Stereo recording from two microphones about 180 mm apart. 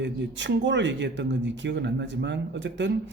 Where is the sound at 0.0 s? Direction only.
85° right.